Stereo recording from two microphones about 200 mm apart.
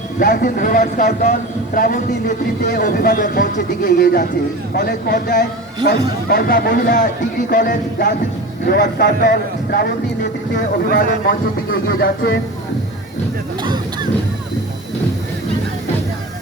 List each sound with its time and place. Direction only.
0.2 s a man's voice: 45° left (ahead or behind)
8.6 s a man's voice: 60° left (ahead or behind)
13.6 s a sound: 20° right (ahead or behind)